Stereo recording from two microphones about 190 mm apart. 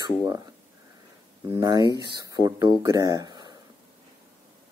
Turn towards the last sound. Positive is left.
turn(degrees=-20)  # may be behind; listen again after turning